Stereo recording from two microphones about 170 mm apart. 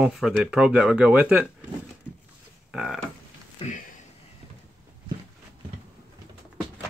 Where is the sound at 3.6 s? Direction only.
35° left (ahead or behind).